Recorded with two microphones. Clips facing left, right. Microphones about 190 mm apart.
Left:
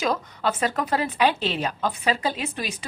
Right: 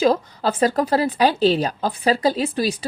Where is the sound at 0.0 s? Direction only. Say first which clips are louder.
Right 6 dB; 35° right (ahead or behind).